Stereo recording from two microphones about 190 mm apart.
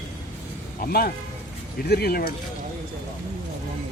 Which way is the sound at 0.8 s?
55° left (ahead or behind).